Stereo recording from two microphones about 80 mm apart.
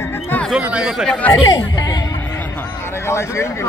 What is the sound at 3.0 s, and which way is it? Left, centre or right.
Speech, left.